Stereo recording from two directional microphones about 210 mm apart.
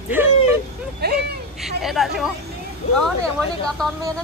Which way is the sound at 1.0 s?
50° right (ahead or behind).